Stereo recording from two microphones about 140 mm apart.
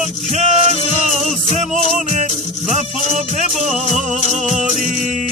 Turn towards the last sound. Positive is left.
turn(degrees=-55)  # may be behind; listen again after turning